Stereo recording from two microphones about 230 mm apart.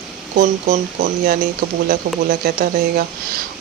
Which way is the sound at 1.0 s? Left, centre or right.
Right.